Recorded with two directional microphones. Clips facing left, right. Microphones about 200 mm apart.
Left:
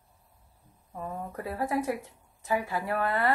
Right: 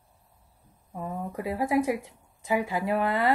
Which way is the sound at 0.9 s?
15° right (ahead or behind).